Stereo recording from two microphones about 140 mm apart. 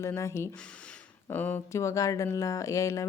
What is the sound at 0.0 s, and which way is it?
Speech, 20° left (ahead or behind).